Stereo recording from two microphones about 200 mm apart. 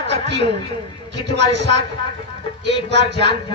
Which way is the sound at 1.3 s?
60° right (ahead or behind).